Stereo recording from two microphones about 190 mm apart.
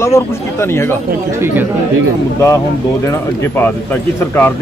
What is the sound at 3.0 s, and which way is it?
Speech, 15° left (ahead or behind).